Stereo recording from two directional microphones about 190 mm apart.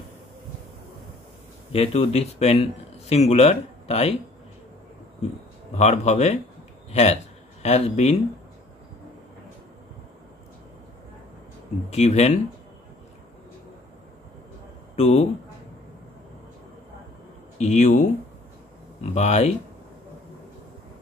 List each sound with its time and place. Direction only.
1.7 s a man's voice: 30° left (ahead or behind)
5.8 s a man's voice: 35° left (ahead or behind)
11.9 s a man's voice: 35° left (ahead or behind)
15.0 s a man's voice: 35° left (ahead or behind)
17.6 s a man's voice: 35° left (ahead or behind)
19.1 s a man's voice: 35° left (ahead or behind)